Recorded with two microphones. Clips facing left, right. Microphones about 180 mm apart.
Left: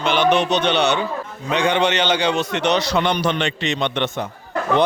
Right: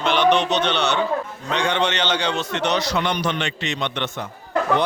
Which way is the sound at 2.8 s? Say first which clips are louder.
Left 3 dB; 30° left (ahead or behind).